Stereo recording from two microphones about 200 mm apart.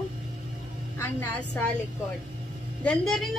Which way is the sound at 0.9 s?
10° left (ahead or behind).